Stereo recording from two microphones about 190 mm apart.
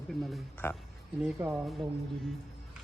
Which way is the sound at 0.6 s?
15° left (ahead or behind).